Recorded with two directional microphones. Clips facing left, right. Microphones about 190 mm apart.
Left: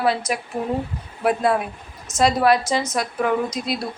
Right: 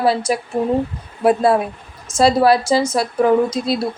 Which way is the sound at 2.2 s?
30° right (ahead or behind).